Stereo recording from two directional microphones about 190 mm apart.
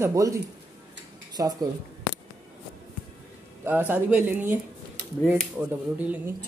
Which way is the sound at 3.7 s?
10° right (ahead or behind).